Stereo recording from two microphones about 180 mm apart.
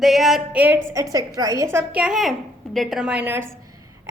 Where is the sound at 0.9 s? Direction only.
20° right (ahead or behind).